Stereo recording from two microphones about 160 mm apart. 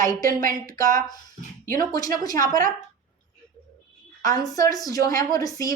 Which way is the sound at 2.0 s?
25° left (ahead or behind).